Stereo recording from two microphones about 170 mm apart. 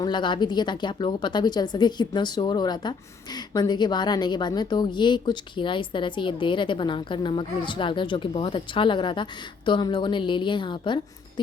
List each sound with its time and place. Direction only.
0.0 s speech: 25° left (ahead or behind)